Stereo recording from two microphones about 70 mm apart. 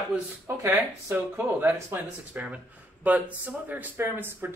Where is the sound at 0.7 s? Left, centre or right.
Right.